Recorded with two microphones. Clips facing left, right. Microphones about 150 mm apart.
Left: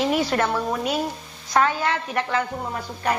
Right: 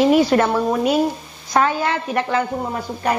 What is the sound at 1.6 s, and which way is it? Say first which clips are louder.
Speech: right 3 dB; 15° right (ahead or behind).